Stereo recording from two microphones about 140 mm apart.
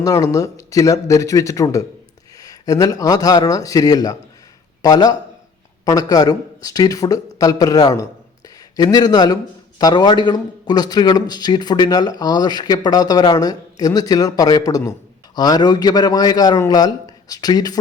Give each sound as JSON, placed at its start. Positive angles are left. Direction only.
{"t": 0.0, "sound": "a man's voice", "side_deg": 25}